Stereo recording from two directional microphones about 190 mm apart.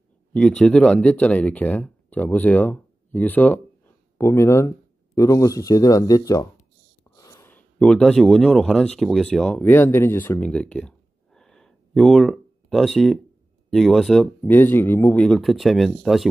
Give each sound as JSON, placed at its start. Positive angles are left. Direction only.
{"t": 0.3, "sound": "speech", "side_deg": 5}
{"t": 14.4, "sound": "speech", "side_deg": 10}